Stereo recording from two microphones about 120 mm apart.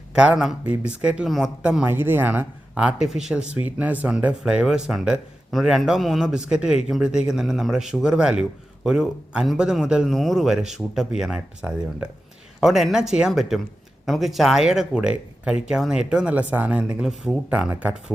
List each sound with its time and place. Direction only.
0.1 s speech: 5° right (ahead or behind)
1.8 s a man's voice: 15° right (ahead or behind)